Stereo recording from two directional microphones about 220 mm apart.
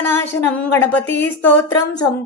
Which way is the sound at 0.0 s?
10° left (ahead or behind).